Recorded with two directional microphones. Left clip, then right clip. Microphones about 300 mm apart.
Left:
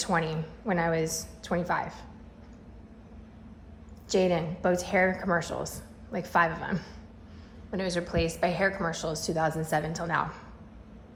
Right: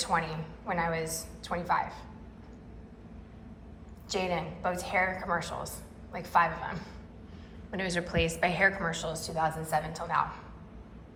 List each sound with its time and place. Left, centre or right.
0.0 s a woman's voice: left
4.1 s a woman's voice: left
7.7 s a woman's voice: centre